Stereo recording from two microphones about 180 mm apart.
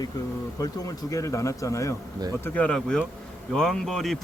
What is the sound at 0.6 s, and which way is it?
A man's voice, 20° left (ahead or behind).